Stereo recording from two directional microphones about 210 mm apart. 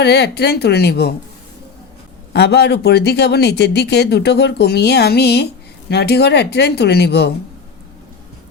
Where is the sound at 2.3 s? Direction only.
55° left (ahead or behind).